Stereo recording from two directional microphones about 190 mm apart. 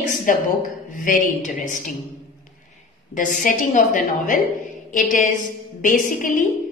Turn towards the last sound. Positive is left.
turn(degrees=45)  # may be behind; listen again after turning